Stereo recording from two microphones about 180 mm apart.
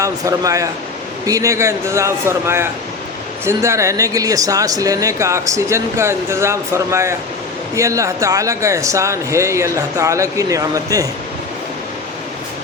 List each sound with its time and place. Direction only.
0.0 s speech: 20° right (ahead or behind)